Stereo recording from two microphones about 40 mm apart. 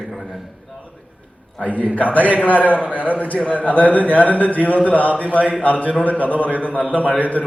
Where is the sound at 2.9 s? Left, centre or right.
Right.